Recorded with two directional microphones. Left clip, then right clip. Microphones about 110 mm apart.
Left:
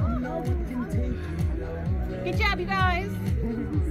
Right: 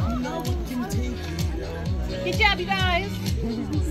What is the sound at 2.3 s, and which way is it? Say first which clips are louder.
Music: right 4 dB; 20° left (ahead or behind).